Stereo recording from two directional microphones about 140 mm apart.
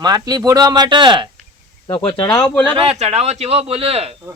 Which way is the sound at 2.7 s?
45° right (ahead or behind).